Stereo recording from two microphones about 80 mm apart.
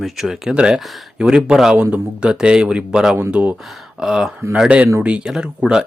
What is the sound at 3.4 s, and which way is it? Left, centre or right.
Speech, centre.